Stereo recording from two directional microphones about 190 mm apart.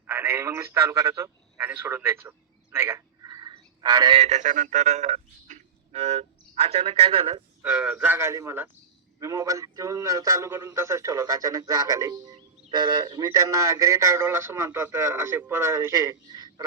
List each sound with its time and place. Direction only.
0.1 s a man's voice: 10° right (ahead or behind)
2.7 s a sound: 10° right (ahead or behind)
4.2 s speech: 40° right (ahead or behind)
7.6 s speech: 10° right (ahead or behind)